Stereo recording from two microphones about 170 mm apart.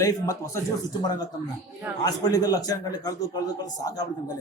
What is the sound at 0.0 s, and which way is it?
A man's voice, 20° left (ahead or behind).